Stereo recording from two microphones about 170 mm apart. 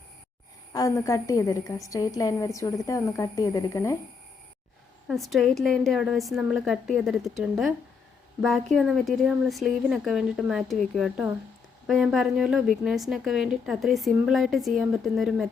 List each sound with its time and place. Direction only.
0.7 s a woman's voice: 20° left (ahead or behind)
5.0 s a woman's voice: centre (ahead or behind)